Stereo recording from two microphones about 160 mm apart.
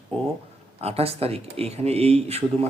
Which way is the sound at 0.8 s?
40° right (ahead or behind).